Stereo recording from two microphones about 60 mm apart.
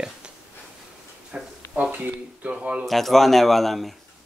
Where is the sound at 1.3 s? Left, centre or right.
Centre.